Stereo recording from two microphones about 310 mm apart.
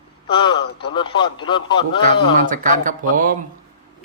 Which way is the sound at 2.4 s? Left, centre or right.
Right.